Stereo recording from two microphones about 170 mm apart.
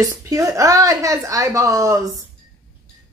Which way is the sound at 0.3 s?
20° right (ahead or behind).